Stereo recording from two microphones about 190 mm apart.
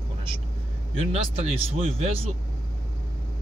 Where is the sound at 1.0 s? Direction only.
30° right (ahead or behind).